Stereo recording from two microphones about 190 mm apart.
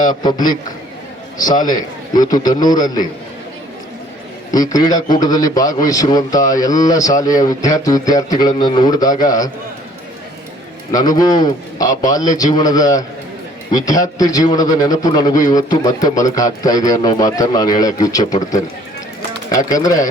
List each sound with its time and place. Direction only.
0.1 s a man's voice: 20° left (ahead or behind)
4.5 s a man's voice: 20° left (ahead or behind)
10.9 s a man's voice: 20° left (ahead or behind)